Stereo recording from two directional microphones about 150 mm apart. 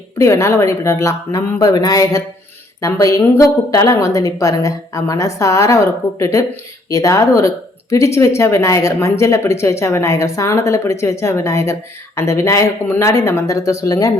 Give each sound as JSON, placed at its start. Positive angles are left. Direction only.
{"t": 0.2, "sound": "speech", "side_deg": 15}